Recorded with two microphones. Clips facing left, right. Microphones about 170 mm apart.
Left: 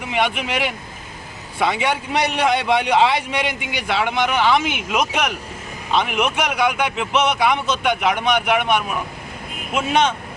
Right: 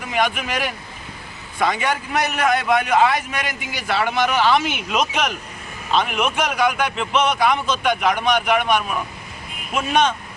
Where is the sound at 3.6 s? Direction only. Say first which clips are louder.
Left 1 dB; 15° left (ahead or behind).